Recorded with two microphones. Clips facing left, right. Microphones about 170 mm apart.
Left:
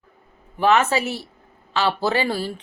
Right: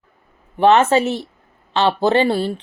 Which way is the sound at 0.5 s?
30° right (ahead or behind).